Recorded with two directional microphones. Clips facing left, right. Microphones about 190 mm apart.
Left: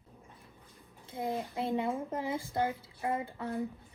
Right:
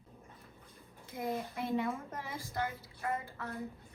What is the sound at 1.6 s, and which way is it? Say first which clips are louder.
A woman's voice: left 3 dB; 30° left (ahead or behind).